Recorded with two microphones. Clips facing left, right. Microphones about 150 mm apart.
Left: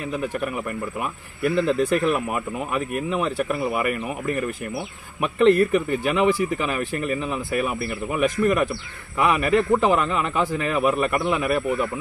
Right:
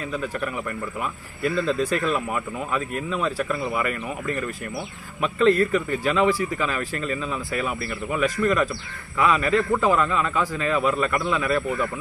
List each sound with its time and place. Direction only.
0.1 s a man's voice: 15° left (ahead or behind)